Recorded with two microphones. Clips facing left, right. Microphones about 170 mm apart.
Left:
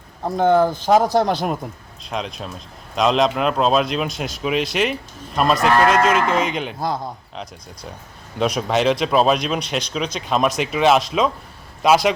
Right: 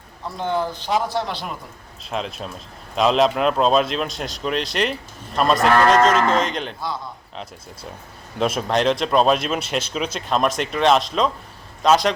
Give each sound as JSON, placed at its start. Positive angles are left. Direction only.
{"t": 0.2, "sound": "a man's voice", "side_deg": 50}
{"t": 2.0, "sound": "a man's voice", "side_deg": 0}
{"t": 6.7, "sound": "a man's voice", "side_deg": 50}
{"t": 8.4, "sound": "a man's voice", "side_deg": 0}